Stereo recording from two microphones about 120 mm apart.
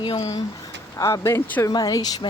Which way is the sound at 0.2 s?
30° left (ahead or behind).